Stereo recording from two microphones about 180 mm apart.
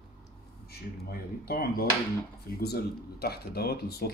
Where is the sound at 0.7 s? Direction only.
60° left (ahead or behind).